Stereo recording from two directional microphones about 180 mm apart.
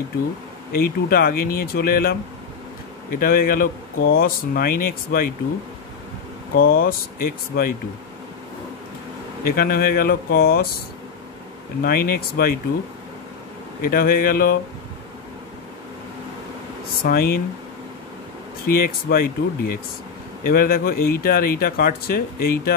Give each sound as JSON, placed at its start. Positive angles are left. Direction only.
{"t": 0.7, "sound": "speech", "side_deg": 55}
{"t": 6.5, "sound": "speech", "side_deg": 55}
{"t": 9.4, "sound": "speech", "side_deg": 55}
{"t": 11.8, "sound": "speech", "side_deg": 55}
{"t": 13.8, "sound": "speech", "side_deg": 55}
{"t": 17.0, "sound": "speech", "side_deg": 55}
{"t": 18.7, "sound": "speech", "side_deg": 55}